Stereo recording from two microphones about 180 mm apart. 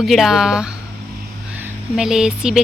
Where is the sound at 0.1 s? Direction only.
Centre (ahead or behind).